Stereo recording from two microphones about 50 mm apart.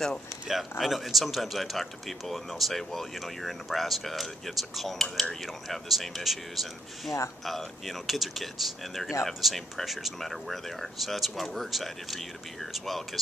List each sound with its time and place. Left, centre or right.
0.5 s speech: centre